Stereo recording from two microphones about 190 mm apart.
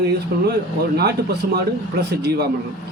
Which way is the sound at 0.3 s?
55° right (ahead or behind).